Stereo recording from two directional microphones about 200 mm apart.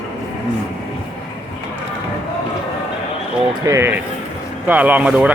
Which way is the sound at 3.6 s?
15° right (ahead or behind).